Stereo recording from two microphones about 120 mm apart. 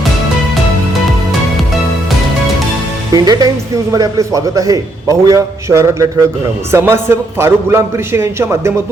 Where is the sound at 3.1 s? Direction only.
35° right (ahead or behind).